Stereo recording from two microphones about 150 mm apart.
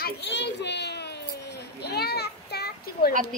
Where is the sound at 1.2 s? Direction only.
90° left.